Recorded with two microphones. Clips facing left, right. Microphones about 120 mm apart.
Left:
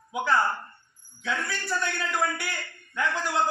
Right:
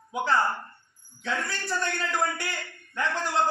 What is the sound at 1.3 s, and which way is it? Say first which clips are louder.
Speech: even; centre (ahead or behind).